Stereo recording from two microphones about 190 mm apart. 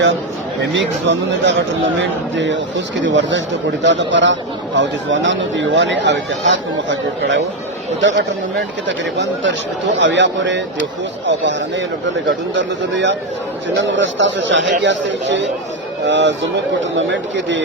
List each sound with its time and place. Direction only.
0.6 s speech: 70° right (ahead or behind)